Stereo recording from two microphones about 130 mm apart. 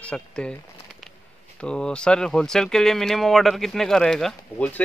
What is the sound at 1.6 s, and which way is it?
Speech, 5° left (ahead or behind).